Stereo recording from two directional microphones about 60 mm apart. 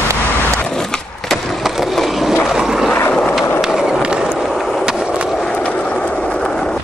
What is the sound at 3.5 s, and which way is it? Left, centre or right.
Skateboard, centre.